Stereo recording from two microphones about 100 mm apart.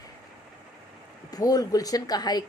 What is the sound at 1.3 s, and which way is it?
A woman's voice, 40° left (ahead or behind).